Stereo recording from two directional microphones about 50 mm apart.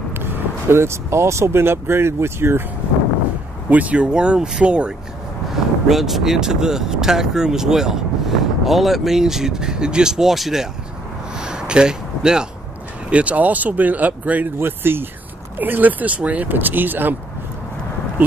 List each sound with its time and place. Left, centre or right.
0.1 s vehicle: right
1.6 s speech: right
3.7 s speech: right
5.9 s speech: centre
11.3 s a sound: centre
13.1 s speech: right
14.6 s speech: right